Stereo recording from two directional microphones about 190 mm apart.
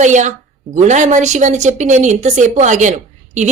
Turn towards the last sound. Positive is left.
turn(degrees=-40)  # may be behind; listen again after turning